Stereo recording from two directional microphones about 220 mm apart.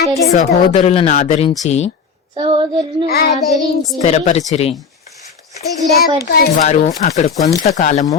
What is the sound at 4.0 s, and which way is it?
Speech, 30° left (ahead or behind).